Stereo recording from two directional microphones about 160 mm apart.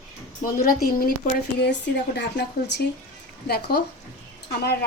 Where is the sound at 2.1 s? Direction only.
90° left.